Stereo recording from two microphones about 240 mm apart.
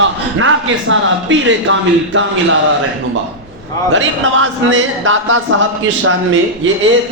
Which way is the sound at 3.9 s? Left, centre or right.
Right.